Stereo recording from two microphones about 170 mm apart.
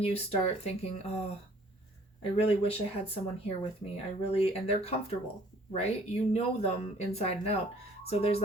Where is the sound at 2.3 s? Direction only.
35° left (ahead or behind).